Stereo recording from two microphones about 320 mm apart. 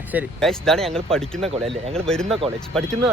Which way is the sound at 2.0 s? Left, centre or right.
Centre.